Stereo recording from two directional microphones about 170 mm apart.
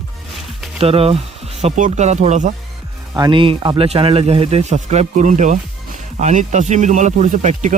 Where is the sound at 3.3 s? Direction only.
30° right (ahead or behind).